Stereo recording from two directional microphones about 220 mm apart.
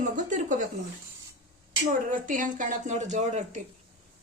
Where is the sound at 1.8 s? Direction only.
35° right (ahead or behind).